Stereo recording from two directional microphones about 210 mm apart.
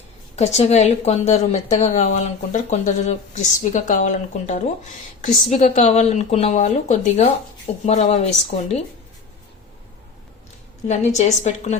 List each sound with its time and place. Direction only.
0.3 s speech: 30° left (ahead or behind)
10.8 s speech: 35° left (ahead or behind)